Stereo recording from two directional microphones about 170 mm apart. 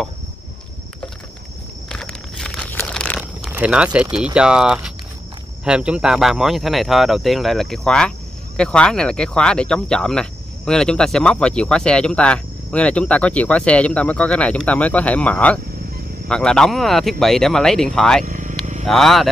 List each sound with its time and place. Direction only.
1.9 s a sound: 5° left (ahead or behind)
3.5 s speech: 5° right (ahead or behind)
18.2 s vehicle: 50° right (ahead or behind)
18.9 s speech: centre (ahead or behind)